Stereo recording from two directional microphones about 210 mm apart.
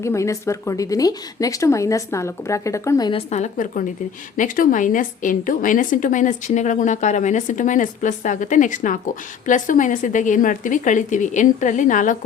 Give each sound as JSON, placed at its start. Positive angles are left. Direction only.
{"t": 0.0, "sound": "a woman's voice", "side_deg": 15}